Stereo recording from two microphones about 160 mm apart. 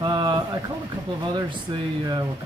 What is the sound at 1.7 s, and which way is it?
Speech, 30° right (ahead or behind).